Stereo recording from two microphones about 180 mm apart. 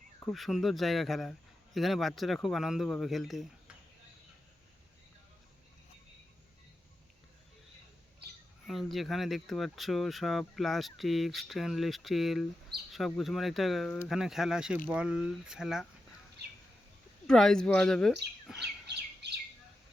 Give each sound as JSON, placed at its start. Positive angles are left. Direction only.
{"t": 0.2, "sound": "speech", "side_deg": 0}
{"t": 8.6, "sound": "speech", "side_deg": 0}
{"t": 17.2, "sound": "speech", "side_deg": 5}
{"t": 18.4, "sound": "chirp", "side_deg": -5}
{"t": 18.9, "sound": "bird", "side_deg": -70}